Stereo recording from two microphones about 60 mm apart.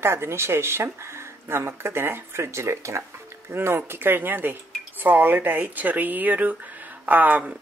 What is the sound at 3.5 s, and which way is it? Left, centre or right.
A woman's voice, right.